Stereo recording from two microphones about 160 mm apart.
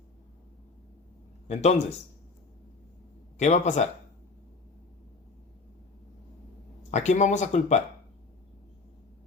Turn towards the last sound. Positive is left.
turn(degrees=45)  # may be behind; listen again after turning